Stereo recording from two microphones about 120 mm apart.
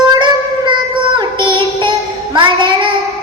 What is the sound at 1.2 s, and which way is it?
Child singing, 40° right (ahead or behind).